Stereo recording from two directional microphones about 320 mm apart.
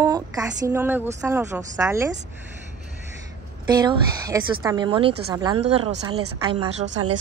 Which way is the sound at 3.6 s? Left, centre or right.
Centre.